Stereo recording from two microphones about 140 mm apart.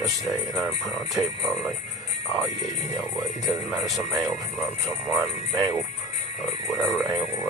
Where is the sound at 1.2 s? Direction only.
25° right (ahead or behind).